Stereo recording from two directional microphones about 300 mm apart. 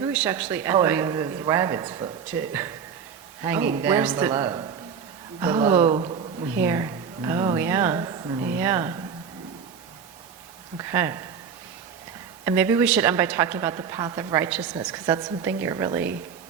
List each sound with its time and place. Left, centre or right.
0.0 s a woman's voice: centre
10.8 s a woman's voice: centre
12.5 s a woman's voice: centre